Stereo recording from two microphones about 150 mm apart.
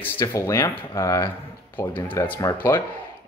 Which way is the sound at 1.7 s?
30° left (ahead or behind).